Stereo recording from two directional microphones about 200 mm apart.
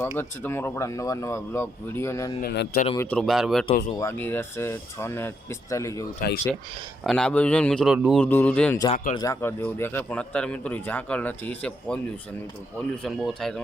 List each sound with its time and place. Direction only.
0.0 s a man's voice: 10° left (ahead or behind)
2.4 s speech: 55° left (ahead or behind)
2.9 s a man's voice: 10° left (ahead or behind)
3.9 s a man's voice: 10° left (ahead or behind)
6.1 s speech: 45° left (ahead or behind)
7.0 s a man's voice: 5° left (ahead or behind)
8.2 s a man's voice: 10° left (ahead or behind)